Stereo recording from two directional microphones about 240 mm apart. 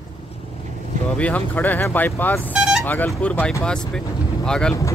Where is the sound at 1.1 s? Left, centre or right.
Centre.